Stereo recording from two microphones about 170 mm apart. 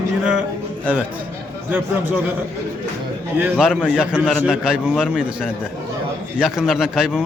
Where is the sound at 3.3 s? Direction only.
5° right (ahead or behind).